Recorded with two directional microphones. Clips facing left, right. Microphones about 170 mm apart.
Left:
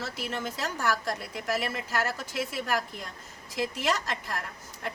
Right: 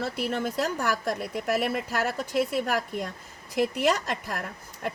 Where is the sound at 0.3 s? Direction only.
55° right (ahead or behind).